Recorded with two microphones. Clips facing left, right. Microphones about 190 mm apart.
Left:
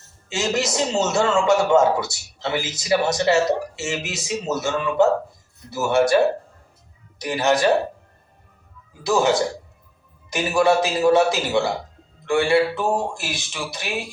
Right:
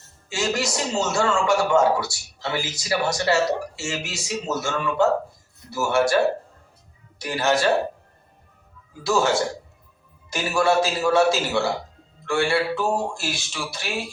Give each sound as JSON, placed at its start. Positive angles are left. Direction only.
{"t": 0.3, "sound": "a man's voice", "side_deg": 20}
{"t": 7.2, "sound": "a man's voice", "side_deg": 20}
{"t": 9.0, "sound": "speech", "side_deg": 20}